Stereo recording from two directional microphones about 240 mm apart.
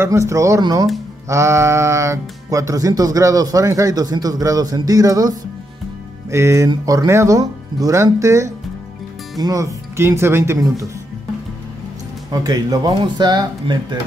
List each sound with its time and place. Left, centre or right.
0.0 s speech: centre
12.3 s speech: centre